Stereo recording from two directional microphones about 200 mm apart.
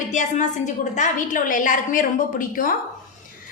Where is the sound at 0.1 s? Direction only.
40° left (ahead or behind).